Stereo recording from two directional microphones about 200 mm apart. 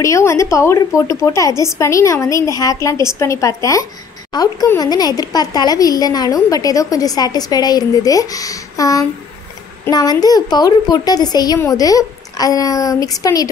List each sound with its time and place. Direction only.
0.0 s a woman's voice: 15° left (ahead or behind)